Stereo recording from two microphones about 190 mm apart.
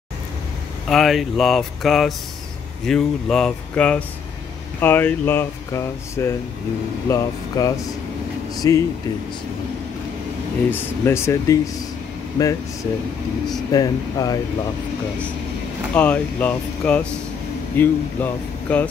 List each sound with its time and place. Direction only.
0.8 s speech: centre (ahead or behind); by 8.8 s 15° left (ahead or behind)
10.7 s speech: 15° left (ahead or behind)
13.7 s speech: 20° left (ahead or behind)
15.9 s speech: 5° left (ahead or behind)